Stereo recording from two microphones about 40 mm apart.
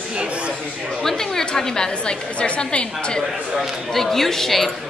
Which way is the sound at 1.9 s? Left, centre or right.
Left.